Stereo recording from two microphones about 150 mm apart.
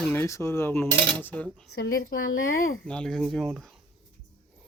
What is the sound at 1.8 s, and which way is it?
Speech, 75° left (ahead or behind).